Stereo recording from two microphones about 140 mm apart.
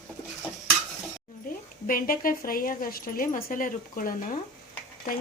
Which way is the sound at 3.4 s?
75° left (ahead or behind).